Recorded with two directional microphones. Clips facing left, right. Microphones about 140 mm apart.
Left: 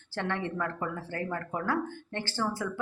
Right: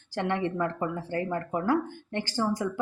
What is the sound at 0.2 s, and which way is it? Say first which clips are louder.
Speech: right 4 dB; 15° right (ahead or behind).